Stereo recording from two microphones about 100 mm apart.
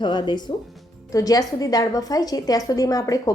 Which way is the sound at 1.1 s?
35° left (ahead or behind).